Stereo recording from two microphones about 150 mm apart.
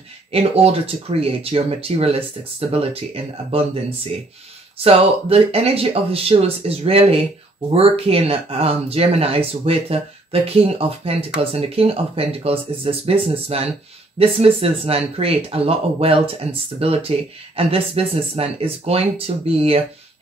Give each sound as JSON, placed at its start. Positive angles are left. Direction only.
{"t": 0.3, "sound": "speech", "side_deg": -40}
{"t": 4.8, "sound": "speech", "side_deg": -40}